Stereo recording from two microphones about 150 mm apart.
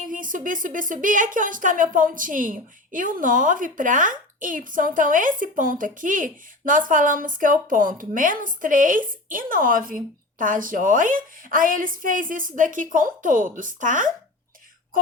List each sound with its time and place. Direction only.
0.0 s speech: 65° right (ahead or behind)